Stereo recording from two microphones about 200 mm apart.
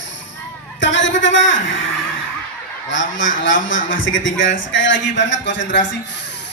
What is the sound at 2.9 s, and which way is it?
A man's voice, 70° left (ahead or behind).